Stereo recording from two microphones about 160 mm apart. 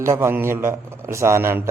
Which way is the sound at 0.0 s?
15° right (ahead or behind).